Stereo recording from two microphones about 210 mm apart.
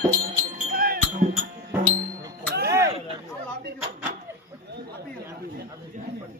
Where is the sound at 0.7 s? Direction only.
45° right (ahead or behind).